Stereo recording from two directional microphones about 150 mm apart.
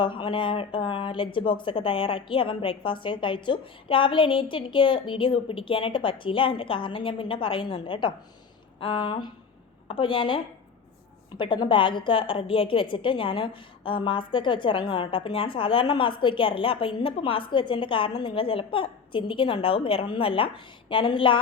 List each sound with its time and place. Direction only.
0.0 s a woman's voice: 35° left (ahead or behind)